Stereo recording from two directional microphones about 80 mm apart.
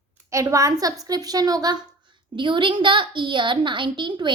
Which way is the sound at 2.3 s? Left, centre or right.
Right.